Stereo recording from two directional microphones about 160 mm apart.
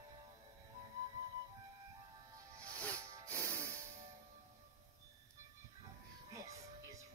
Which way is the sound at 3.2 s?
10° left (ahead or behind).